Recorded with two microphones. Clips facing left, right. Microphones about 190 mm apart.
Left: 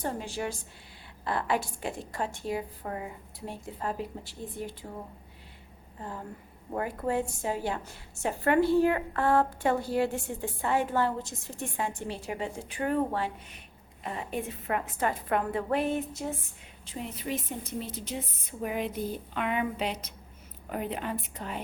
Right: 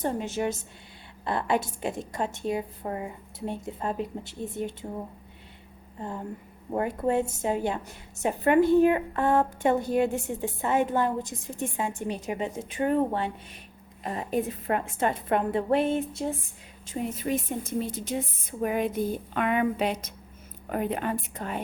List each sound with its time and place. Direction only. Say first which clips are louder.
0.0 s a woman's voice: right 5 dB; 20° right (ahead or behind)
6.7 s a woman's voice: right 4 dB; 25° right (ahead or behind)
14.0 s a woman's voice: right 6 dB; 40° right (ahead or behind)
16.8 s a woman's voice: right 6 dB; 45° right (ahead or behind)